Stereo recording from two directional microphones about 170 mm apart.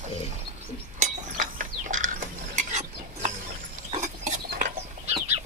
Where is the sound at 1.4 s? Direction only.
50° right (ahead or behind).